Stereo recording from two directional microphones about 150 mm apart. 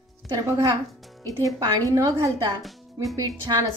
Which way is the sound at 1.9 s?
20° right (ahead or behind).